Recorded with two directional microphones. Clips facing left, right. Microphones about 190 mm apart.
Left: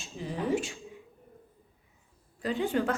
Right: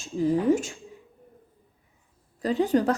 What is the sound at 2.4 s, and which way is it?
Speech, 40° right (ahead or behind).